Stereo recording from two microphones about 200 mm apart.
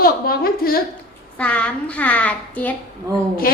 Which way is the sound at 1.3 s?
5° left (ahead or behind).